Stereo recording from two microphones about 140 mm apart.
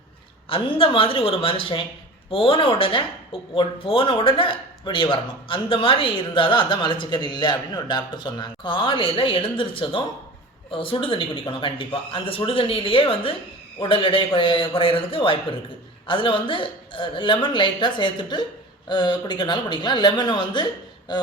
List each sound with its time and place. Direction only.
0.4 s speech: 40° left (ahead or behind)